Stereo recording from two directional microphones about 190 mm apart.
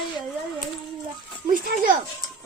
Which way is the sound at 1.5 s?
45° right (ahead or behind).